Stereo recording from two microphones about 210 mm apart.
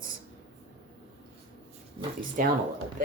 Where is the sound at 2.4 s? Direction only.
40° right (ahead or behind).